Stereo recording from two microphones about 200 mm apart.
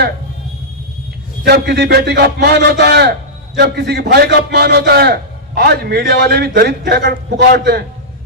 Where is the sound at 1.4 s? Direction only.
55° right (ahead or behind).